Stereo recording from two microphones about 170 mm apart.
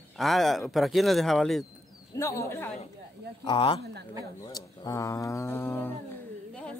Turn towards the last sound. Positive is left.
turn(degrees=15)  # may be behind; listen again after turning